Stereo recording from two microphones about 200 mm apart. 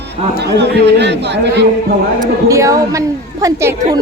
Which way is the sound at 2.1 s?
15° right (ahead or behind).